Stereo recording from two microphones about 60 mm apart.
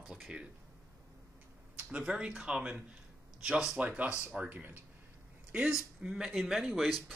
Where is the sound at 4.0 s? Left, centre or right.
Right.